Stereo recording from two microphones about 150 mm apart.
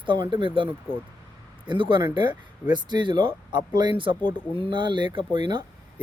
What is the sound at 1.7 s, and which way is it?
Speech, 30° right (ahead or behind).